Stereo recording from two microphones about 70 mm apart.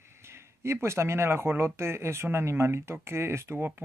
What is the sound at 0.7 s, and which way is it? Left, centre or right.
Speech, right.